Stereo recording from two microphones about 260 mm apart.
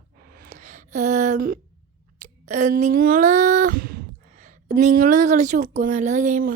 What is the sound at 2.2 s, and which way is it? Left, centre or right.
Speech, right.